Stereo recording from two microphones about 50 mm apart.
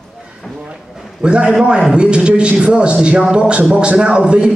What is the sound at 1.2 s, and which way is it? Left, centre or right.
A man's voice, centre.